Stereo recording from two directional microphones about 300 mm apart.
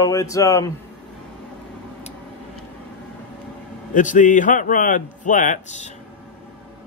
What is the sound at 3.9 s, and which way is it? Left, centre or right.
Speech, left.